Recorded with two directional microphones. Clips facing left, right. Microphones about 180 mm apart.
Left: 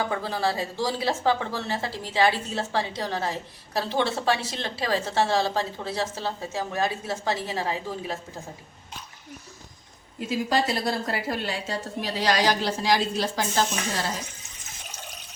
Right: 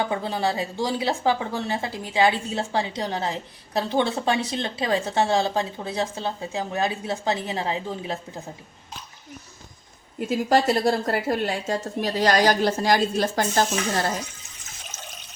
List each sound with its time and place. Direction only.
0.0 s a woman's voice: 20° right (ahead or behind)
10.2 s a woman's voice: 50° right (ahead or behind)